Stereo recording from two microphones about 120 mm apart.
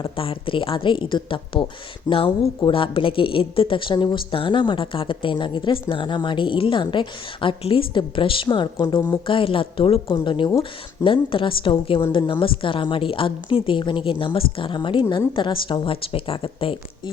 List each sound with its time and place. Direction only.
0.0 s speech: 50° left (ahead or behind); by 9.1 s 35° left (ahead or behind)
9.2 s speech: 45° left (ahead or behind)